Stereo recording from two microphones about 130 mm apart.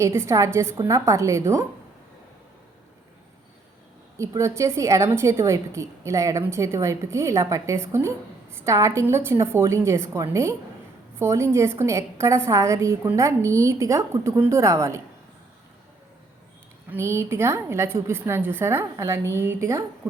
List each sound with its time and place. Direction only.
0.0 s a woman's voice: 20° right (ahead or behind)
4.2 s a woman's voice: 20° right (ahead or behind)
16.9 s a woman's voice: 20° right (ahead or behind)